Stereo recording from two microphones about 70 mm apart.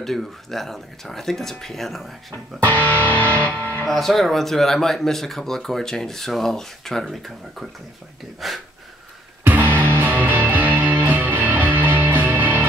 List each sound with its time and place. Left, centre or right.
0.0 s speech: centre
2.6 s music: left
3.8 s speech: centre
9.4 s music: right